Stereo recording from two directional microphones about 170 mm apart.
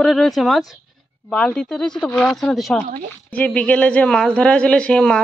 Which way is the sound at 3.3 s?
10° left (ahead or behind).